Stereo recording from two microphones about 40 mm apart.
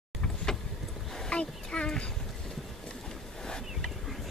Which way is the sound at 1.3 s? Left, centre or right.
Left.